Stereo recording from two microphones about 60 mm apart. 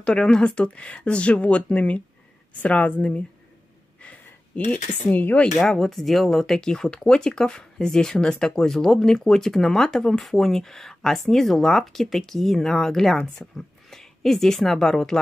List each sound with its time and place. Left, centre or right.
0.0 s speech: centre
4.6 s speech: left
5.6 s speech: centre